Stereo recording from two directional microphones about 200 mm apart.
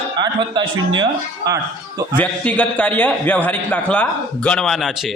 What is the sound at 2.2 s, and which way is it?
A man's voice, 5° left (ahead or behind).